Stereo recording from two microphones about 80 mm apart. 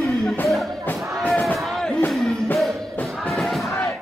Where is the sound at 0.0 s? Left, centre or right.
Centre.